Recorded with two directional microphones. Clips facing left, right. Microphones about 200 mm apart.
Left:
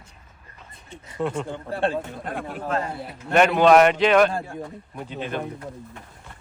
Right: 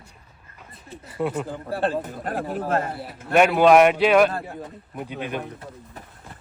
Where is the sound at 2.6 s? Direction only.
50° right (ahead or behind).